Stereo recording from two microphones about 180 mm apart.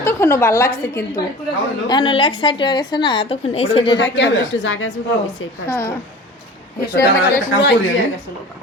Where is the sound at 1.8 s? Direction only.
25° left (ahead or behind).